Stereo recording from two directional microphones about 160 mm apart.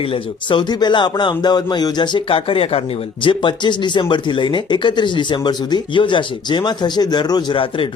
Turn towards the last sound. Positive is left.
turn(degrees=30)  # may be behind; listen again after turning